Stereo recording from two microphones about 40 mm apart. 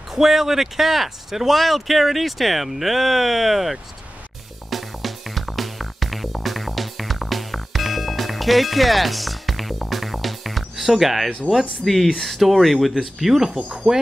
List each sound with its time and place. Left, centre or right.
0.1 s speech: centre
4.6 s music: centre
11.5 s speech: centre
13.6 s speech: centre